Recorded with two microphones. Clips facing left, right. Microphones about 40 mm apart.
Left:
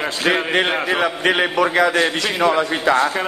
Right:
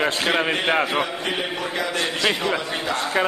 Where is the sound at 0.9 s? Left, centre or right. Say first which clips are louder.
Left 6 dB; left.